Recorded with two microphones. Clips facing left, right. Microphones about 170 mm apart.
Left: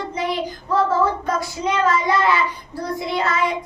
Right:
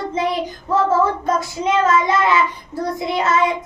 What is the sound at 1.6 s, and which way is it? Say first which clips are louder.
Child singing: right 3 dB; 20° right (ahead or behind).